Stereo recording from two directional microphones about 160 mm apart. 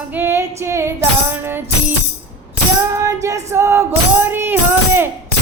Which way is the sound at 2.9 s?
20° right (ahead or behind).